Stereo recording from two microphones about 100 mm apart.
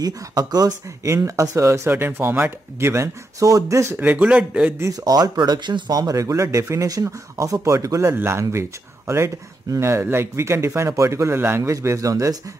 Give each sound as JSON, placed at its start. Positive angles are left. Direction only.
{"t": 0.0, "sound": "speech", "side_deg": -40}
{"t": 4.0, "sound": "speech", "side_deg": -15}
{"t": 4.7, "sound": "speech", "side_deg": -35}